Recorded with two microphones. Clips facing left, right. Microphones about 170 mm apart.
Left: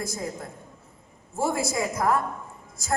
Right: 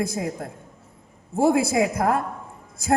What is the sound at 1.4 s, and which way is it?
Speech, 55° right (ahead or behind).